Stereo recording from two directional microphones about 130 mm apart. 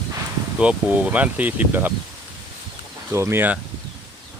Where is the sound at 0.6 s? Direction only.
10° right (ahead or behind).